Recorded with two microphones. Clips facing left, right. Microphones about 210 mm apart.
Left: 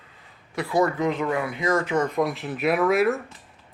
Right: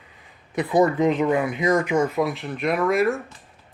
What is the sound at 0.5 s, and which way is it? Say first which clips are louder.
Speech: right 4 dB; 20° right (ahead or behind).